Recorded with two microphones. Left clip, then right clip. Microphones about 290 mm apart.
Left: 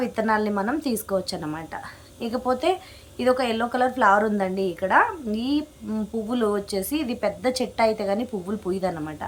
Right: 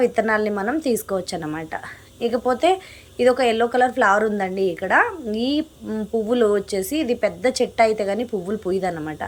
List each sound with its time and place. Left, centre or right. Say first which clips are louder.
0.0 s a woman's voice: right 5 dB; centre